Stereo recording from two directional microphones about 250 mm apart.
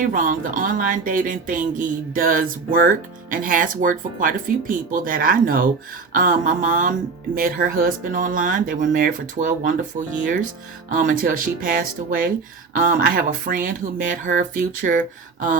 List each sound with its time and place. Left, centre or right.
0.0 s speech: right